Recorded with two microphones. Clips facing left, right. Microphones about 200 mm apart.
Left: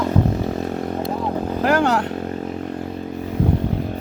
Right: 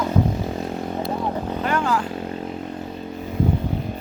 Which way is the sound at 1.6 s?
75° left (ahead or behind).